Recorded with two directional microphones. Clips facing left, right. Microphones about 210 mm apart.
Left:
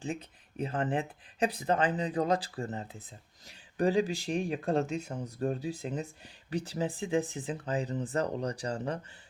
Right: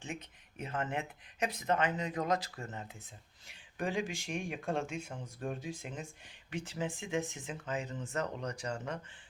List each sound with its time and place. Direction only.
0.0 s speech: 35° left (ahead or behind)